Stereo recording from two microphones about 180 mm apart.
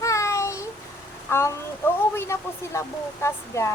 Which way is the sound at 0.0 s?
15° left (ahead or behind).